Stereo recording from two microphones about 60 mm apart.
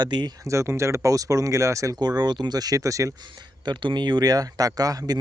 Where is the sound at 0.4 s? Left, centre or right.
Right.